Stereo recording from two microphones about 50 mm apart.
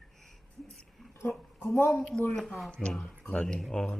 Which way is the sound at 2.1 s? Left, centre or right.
Centre.